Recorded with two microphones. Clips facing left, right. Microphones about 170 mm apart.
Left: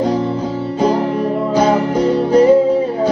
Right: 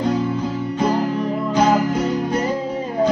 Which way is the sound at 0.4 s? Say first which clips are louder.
Left 4 dB; 30° left (ahead or behind).